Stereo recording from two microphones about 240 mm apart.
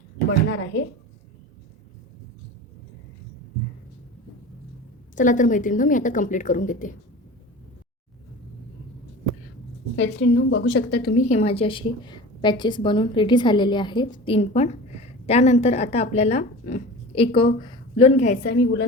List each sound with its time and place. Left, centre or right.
0.4 s a woman's voice: left
5.1 s a woman's voice: left
9.9 s a woman's voice: left
18.4 s a woman's voice: left